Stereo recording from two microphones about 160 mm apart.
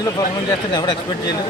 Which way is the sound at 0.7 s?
25° left (ahead or behind).